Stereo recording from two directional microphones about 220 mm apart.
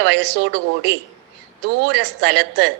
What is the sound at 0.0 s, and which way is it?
A woman's voice, 50° right (ahead or behind).